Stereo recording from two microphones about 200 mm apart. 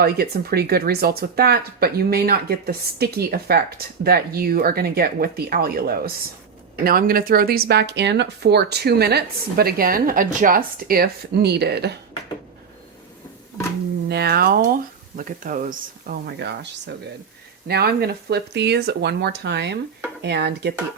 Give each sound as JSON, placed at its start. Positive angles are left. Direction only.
{"t": 0.0, "sound": "speech", "side_deg": -50}
{"t": 14.1, "sound": "speech", "side_deg": -55}